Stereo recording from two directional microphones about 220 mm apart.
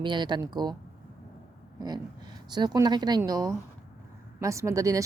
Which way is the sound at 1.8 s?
20° right (ahead or behind).